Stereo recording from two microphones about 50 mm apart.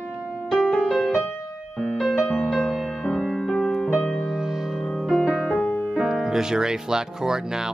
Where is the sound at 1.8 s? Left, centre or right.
Centre.